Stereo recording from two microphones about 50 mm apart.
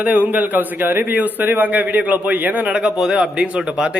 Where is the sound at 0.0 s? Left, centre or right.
Right.